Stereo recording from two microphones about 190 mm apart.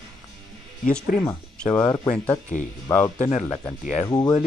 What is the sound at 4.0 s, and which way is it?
Speech, 20° left (ahead or behind).